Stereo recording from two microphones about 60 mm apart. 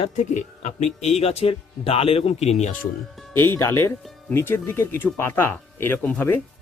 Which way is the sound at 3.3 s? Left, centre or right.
Left.